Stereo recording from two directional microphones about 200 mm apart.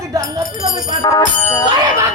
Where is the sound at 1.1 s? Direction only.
15° left (ahead or behind).